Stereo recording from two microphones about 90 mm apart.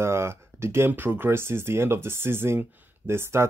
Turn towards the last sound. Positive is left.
turn(degrees=-30)  # may be behind; listen again after turning